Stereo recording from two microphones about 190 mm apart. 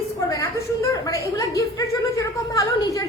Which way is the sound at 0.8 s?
15° left (ahead or behind).